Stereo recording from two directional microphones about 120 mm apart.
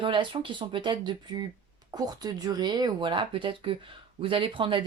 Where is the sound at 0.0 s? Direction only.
45° right (ahead or behind).